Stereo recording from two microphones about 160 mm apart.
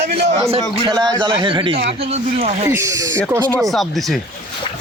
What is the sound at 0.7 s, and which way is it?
A man's voice, 30° right (ahead or behind).